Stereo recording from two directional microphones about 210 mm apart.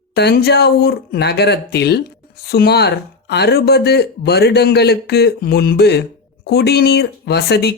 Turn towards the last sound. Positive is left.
turn(degrees=50)  # may be behind; listen again after turning